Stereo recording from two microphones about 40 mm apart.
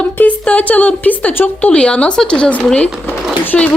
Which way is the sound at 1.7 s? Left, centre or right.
Left.